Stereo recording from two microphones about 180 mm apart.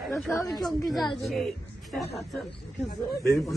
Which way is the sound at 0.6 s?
Centre (ahead or behind).